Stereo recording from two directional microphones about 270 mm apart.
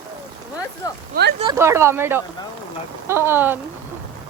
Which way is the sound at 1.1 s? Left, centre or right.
Right.